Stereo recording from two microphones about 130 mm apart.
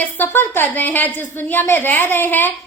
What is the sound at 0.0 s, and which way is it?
A woman's voice, 15° left (ahead or behind).